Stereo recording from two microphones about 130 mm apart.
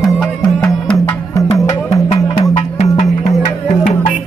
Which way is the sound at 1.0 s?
25° left (ahead or behind).